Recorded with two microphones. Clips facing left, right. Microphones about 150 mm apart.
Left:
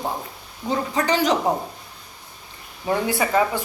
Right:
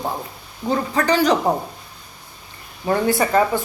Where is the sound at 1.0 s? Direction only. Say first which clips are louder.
Right 3 dB; 20° left (ahead or behind).